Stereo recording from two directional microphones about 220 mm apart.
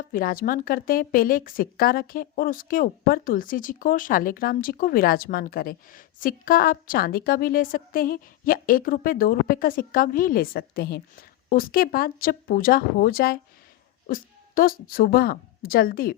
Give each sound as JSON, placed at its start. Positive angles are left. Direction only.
{"t": 0.1, "sound": "a woman's voice", "side_deg": 40}